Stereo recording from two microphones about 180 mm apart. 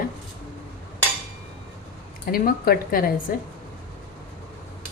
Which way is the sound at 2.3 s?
55° left (ahead or behind).